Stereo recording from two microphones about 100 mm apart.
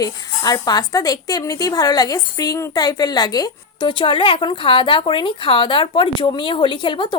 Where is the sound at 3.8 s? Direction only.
55° left (ahead or behind).